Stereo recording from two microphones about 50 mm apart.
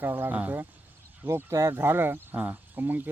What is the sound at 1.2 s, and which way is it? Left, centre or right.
Speech, right.